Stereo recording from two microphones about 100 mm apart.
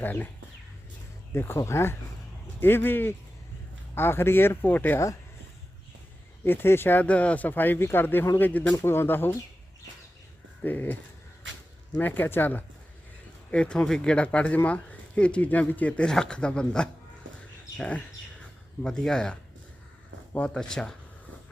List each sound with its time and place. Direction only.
0.0 s speech: 20° left (ahead or behind)
1.3 s speech: 25° left (ahead or behind)
6.4 s speech: 20° left (ahead or behind)
10.6 s speech: 20° left (ahead or behind)
11.9 s speech: 20° left (ahead or behind)